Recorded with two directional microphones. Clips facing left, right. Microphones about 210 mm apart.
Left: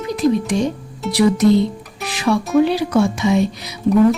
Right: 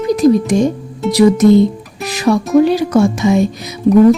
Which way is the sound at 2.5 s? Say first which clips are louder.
Right 4 dB; 45° right (ahead or behind).